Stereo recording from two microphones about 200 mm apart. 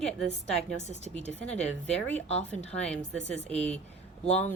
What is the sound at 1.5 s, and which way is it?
Speech, 5° left (ahead or behind).